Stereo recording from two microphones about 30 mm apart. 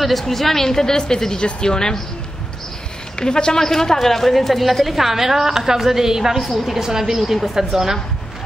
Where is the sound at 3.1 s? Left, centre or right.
Left.